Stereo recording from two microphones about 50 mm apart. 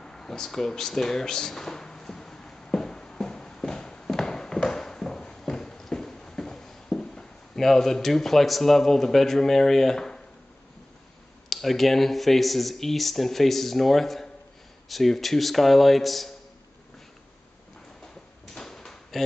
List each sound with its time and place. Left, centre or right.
0.0 s a sound: centre
11.4 s speech: centre
18.0 s drawer open or close: centre